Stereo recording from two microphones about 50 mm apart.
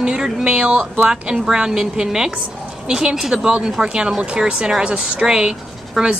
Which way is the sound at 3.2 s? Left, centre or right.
Centre.